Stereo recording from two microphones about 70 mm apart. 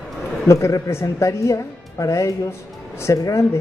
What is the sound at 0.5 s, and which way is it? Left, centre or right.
A woman's voice, left.